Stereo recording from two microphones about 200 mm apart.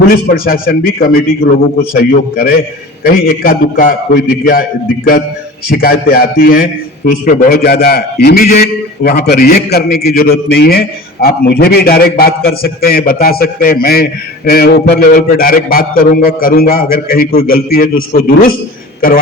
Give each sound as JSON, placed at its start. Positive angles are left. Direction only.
{"t": 0.1, "sound": "a man's voice", "side_deg": 45}
{"t": 5.7, "sound": "a man's voice", "side_deg": 50}